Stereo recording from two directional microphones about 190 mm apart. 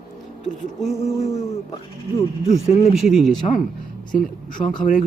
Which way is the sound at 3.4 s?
30° left (ahead or behind).